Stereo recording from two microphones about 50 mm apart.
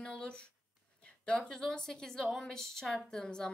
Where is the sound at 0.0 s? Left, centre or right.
Centre.